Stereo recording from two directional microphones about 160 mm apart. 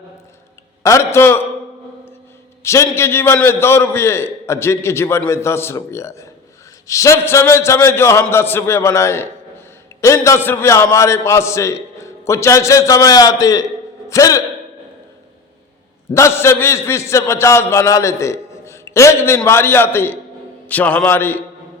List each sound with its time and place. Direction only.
0.8 s a man's voice: 20° left (ahead or behind)
2.6 s a man's voice: 15° left (ahead or behind)
16.1 s a man's voice: 15° left (ahead or behind)